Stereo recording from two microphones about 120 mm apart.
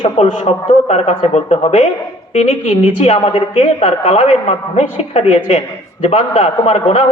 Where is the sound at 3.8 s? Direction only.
70° left (ahead or behind).